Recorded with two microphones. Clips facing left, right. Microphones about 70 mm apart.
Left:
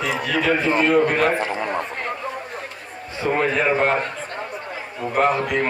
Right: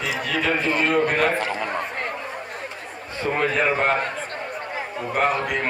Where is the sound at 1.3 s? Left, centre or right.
Left.